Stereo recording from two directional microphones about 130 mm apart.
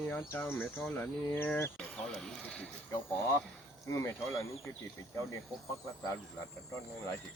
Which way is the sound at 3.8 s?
20° left (ahead or behind).